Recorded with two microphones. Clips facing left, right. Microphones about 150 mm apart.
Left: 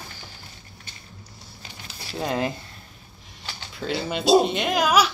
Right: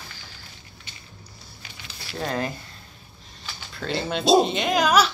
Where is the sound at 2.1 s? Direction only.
15° left (ahead or behind).